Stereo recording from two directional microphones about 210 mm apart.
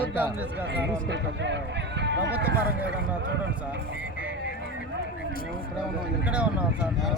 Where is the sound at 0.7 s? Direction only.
55° right (ahead or behind).